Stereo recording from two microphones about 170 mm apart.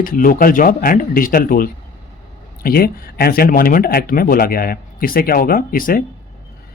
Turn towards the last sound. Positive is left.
turn(degrees=55)  # may be behind; listen again after turning